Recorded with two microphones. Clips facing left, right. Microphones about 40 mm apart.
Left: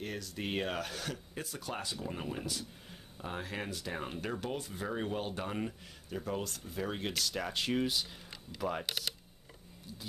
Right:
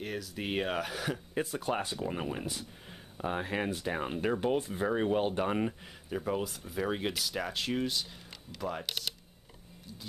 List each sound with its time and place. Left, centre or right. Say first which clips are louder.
0.0 s speech: right 2 dB; centre
1.3 s speech: right 8 dB; right
2.0 s speech: right 4 dB; centre